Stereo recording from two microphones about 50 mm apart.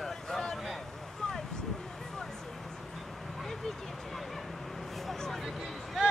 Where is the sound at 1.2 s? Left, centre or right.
Centre.